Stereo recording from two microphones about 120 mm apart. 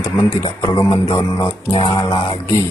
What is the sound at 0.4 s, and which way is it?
Speech, 40° left (ahead or behind).